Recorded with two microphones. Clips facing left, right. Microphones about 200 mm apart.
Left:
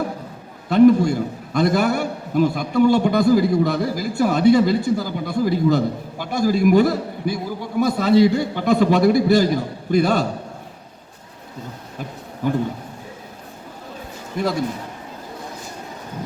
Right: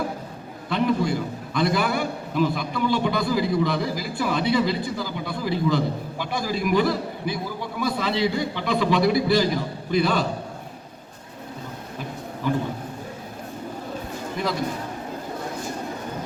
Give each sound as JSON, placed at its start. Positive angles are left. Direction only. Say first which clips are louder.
{"t": 0.7, "sound": "a man's voice", "louder": "left 9 dB", "side_deg": 45}
{"t": 12.4, "sound": "a man's voice", "louder": "left 3 dB", "side_deg": 45}